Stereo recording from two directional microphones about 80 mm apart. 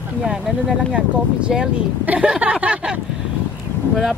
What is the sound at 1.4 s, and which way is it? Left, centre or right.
Speech, centre.